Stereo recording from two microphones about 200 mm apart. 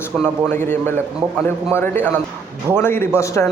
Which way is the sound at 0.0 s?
10° left (ahead or behind).